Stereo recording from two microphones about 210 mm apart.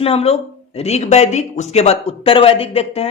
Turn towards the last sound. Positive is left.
turn(degrees=30)  # may be behind; listen again after turning